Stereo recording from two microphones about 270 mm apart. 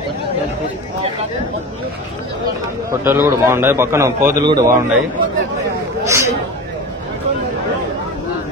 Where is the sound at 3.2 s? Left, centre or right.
Centre.